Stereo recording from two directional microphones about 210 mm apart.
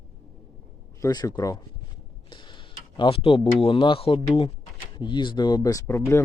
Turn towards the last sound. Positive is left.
turn(degrees=10)  # may be behind; listen again after turning